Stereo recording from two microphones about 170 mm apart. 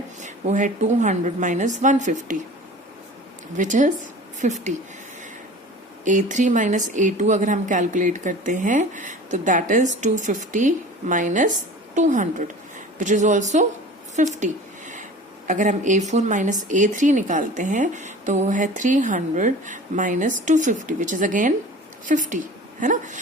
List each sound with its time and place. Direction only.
0.2 s speech: 45° right (ahead or behind)
3.6 s speech: 45° right (ahead or behind)
6.1 s speech: 45° right (ahead or behind)
14.2 s a sound: 45° right (ahead or behind)
15.4 s a woman's voice: 45° right (ahead or behind)